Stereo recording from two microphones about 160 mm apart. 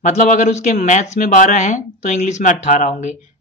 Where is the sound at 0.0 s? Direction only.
50° left (ahead or behind).